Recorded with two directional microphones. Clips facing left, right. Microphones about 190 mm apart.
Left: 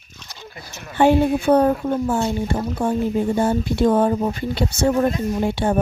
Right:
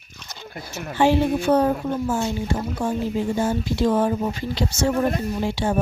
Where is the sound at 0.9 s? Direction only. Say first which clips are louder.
Left 3 dB; 55° left (ahead or behind).